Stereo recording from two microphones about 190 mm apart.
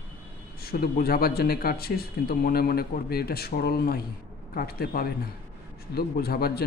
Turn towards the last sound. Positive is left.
turn(degrees=55)  # may be behind; listen again after turning